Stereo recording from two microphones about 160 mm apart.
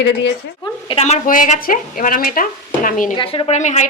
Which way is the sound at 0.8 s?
40° left (ahead or behind).